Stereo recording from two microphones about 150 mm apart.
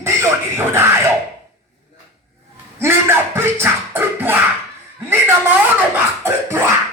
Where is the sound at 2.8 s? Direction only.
15° right (ahead or behind).